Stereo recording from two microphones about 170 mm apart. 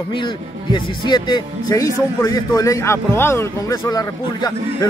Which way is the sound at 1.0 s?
25° left (ahead or behind).